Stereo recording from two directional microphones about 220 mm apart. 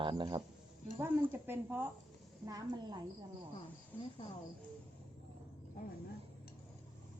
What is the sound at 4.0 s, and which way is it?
Speech, 25° left (ahead or behind).